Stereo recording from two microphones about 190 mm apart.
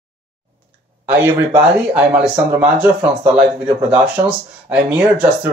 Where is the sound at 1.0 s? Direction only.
10° right (ahead or behind).